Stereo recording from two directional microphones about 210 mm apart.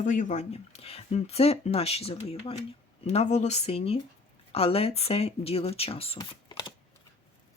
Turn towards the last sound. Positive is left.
turn(degrees=20)  # may be behind; listen again after turning